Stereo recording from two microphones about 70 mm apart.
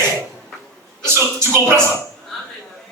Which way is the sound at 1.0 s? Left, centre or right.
Right.